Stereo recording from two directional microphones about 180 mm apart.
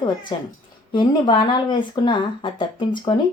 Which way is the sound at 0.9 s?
25° left (ahead or behind).